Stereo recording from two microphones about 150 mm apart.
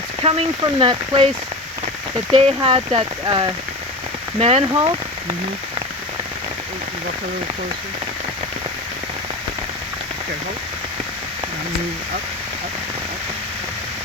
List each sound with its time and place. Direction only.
0.2 s speech: 40° right (ahead or behind)
2.3 s speech: 35° right (ahead or behind)
4.4 s speech: 40° right (ahead or behind)
4.7 s speech: 30° right (ahead or behind)